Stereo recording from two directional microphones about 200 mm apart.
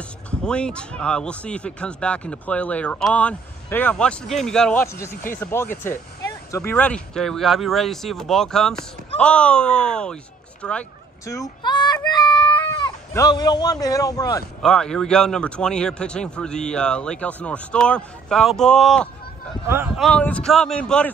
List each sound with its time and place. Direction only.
0.3 s speech: 5° left (ahead or behind)
10.6 s a sound: 5° left (ahead or behind)
14.6 s speech: 5° left (ahead or behind)